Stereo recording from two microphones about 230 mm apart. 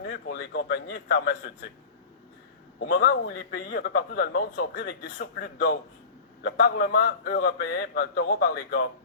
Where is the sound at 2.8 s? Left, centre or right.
Left.